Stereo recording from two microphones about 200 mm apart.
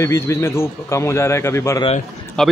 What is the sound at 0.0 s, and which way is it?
Speech, 15° left (ahead or behind).